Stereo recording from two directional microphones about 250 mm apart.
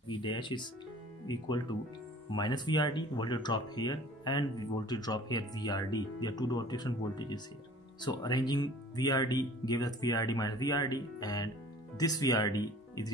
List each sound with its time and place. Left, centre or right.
0.1 s speech: centre